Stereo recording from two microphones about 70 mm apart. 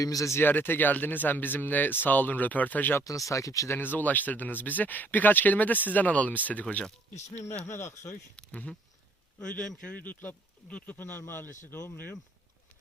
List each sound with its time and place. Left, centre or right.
0.0 s speech: left
0.3 s speech: left
3.0 s speech: left
3.8 s speech: left
7.6 s a man's voice: left
8.4 s a man's voice: centre